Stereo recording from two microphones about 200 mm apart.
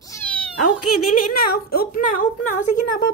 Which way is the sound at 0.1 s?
10° left (ahead or behind).